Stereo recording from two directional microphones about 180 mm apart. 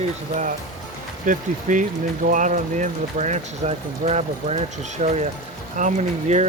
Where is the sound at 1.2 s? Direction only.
45° right (ahead or behind).